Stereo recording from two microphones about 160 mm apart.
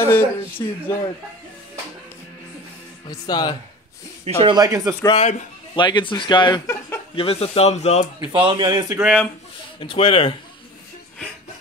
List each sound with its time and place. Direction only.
0.1 s speech: 15° left (ahead or behind)
3.1 s speech: 25° left (ahead or behind)
4.2 s speech: 35° right (ahead or behind)
4.6 s a man's voice: 20° right (ahead or behind)
5.1 s speech: 45° left (ahead or behind)
5.8 s speech: 30° left (ahead or behind); by 8.1 s 45° left (ahead or behind)
8.2 s a man's voice: 30° right (ahead or behind)
9.0 s speech: 5° left (ahead or behind)
9.8 s speech: 35° left (ahead or behind)